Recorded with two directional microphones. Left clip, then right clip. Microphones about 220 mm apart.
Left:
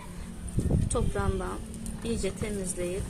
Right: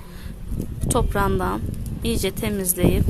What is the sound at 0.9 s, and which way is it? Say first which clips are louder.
Speech: right 13 dB; 45° right (ahead or behind).